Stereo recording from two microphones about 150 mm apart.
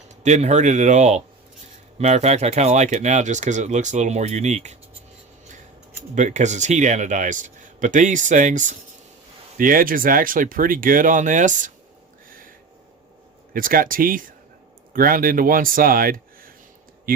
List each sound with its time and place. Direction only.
0.2 s speech: 50° right (ahead or behind)
6.1 s a man's voice: 50° right (ahead or behind)
9.6 s speech: 70° right (ahead or behind)
13.5 s speech: 70° right (ahead or behind)